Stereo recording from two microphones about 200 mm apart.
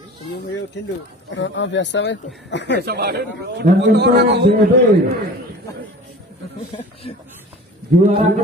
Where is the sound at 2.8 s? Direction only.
50° right (ahead or behind).